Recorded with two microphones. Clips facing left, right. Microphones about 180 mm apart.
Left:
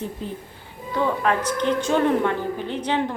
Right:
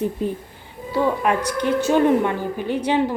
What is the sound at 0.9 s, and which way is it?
A woman's voice, 15° right (ahead or behind).